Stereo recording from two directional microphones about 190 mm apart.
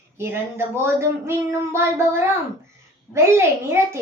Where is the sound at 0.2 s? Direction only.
15° right (ahead or behind).